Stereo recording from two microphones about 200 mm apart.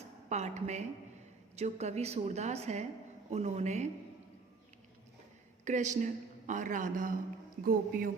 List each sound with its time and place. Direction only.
0.3 s a woman's voice: 35° right (ahead or behind)
5.6 s a woman's voice: 35° right (ahead or behind)